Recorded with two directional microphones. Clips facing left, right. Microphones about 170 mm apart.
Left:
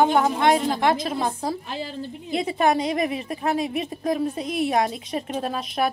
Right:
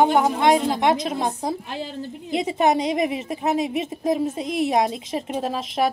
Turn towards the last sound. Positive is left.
turn(degrees=-20)  # may be behind; listen again after turning